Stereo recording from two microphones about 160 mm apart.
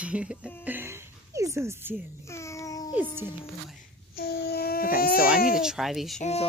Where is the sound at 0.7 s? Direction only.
15° right (ahead or behind).